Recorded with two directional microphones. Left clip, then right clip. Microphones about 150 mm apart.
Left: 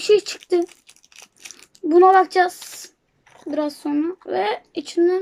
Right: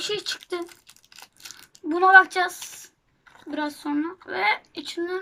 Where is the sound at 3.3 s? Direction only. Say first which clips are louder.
Left 8 dB; 30° right (ahead or behind).